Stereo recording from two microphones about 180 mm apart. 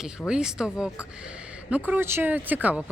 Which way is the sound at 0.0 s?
5° right (ahead or behind).